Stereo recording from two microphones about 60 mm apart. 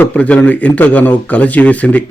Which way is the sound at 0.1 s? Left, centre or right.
Left.